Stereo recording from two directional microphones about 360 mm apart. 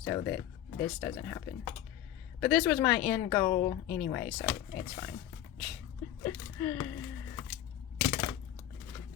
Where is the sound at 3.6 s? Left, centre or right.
Left.